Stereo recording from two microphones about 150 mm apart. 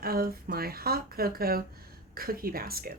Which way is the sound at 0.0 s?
90° right.